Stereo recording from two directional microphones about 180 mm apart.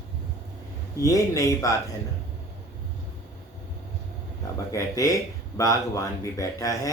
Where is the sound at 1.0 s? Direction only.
20° left (ahead or behind).